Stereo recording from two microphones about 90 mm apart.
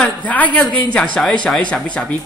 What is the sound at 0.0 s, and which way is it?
A man's voice, 15° left (ahead or behind).